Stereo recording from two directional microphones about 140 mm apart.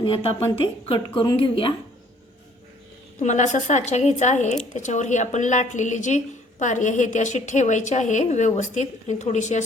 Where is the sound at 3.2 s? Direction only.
55° left (ahead or behind).